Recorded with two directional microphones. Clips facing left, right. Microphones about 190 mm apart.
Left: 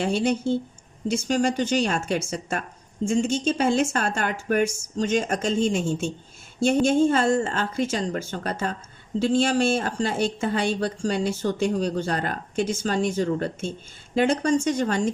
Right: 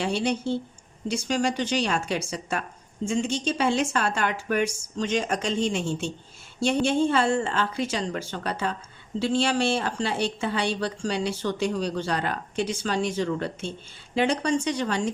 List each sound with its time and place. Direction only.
0.0 s a woman's voice: 45° left (ahead or behind)